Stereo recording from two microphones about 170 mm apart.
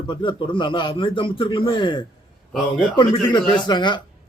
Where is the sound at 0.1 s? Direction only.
30° left (ahead or behind).